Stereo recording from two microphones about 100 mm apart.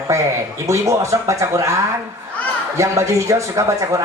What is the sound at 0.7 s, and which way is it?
Speech, 30° right (ahead or behind).